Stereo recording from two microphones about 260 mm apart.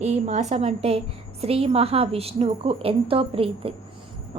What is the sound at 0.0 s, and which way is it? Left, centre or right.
A woman's voice, right.